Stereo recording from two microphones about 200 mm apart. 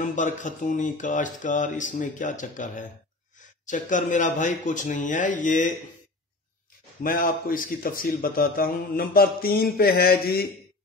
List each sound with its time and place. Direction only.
0.0 s speech: 40° left (ahead or behind)
7.0 s a man's voice: 45° left (ahead or behind)